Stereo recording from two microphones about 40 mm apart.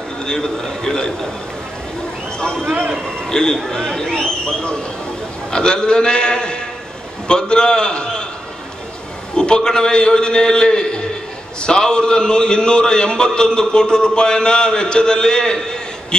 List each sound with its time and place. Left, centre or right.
0.3 s a man's voice: centre
3.3 s a man's voice: centre
9.3 s a man's voice: left